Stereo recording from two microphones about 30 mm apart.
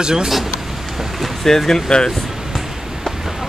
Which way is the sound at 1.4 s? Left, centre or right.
Centre.